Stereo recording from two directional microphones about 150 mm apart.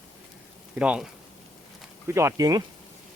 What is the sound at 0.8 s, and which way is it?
Speech, 5° right (ahead or behind).